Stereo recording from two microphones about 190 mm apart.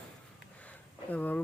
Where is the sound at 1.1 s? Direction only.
10° left (ahead or behind).